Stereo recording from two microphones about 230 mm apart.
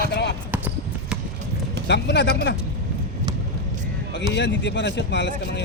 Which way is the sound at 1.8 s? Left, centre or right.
Left.